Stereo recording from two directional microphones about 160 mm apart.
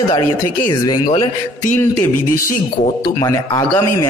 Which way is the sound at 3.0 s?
25° left (ahead or behind).